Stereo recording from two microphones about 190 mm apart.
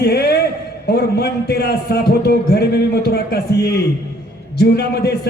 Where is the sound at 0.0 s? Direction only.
55° left (ahead or behind).